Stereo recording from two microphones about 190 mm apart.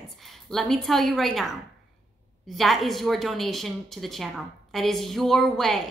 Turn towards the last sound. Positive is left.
turn(degrees=0)  # may be behind; listen again after turning